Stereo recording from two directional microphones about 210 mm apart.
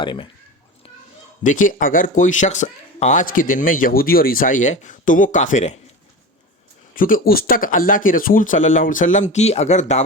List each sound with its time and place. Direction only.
0.0 s speech: 20° left (ahead or behind)
1.5 s speech: 40° left (ahead or behind)
6.9 s speech: 40° left (ahead or behind)